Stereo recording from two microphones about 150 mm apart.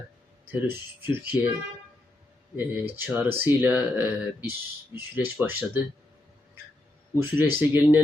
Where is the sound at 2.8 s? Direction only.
15° right (ahead or behind).